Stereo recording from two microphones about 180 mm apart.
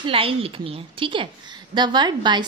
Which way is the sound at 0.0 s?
30° right (ahead or behind).